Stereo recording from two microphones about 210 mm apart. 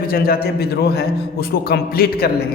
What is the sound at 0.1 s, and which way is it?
A man's voice, 45° left (ahead or behind).